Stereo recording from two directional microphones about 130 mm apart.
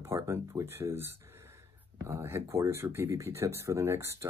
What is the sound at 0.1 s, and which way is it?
Speech, 20° right (ahead or behind).